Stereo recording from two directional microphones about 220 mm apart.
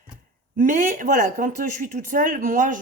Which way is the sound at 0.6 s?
35° right (ahead or behind).